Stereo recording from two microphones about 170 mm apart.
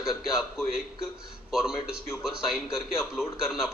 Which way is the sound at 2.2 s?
Centre (ahead or behind).